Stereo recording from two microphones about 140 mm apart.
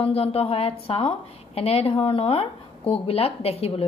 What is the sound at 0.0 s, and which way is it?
A woman's voice, 45° left (ahead or behind).